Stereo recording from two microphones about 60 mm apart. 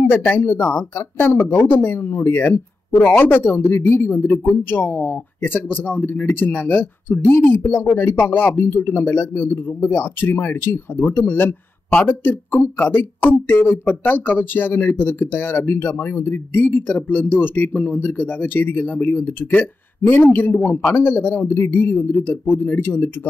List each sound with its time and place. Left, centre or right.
0.1 s speech: left